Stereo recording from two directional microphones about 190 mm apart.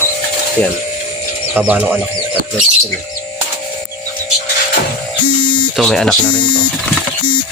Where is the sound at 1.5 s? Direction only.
10° right (ahead or behind).